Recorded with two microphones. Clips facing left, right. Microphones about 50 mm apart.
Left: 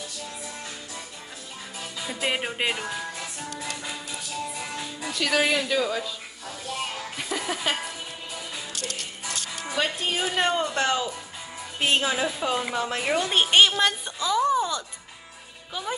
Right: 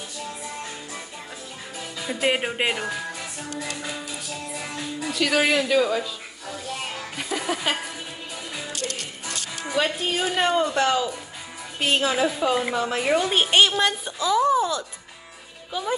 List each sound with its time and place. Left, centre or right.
2.2 s speech: centre
4.6 s speech: centre
7.2 s music: centre
8.7 s music: right
9.7 s a woman's voice: centre